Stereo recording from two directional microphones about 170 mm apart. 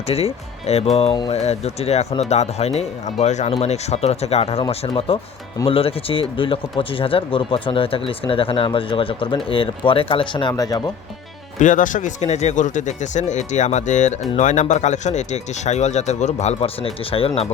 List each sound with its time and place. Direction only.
0.1 s speech: 35° left (ahead or behind)
11.6 s speech: 50° left (ahead or behind)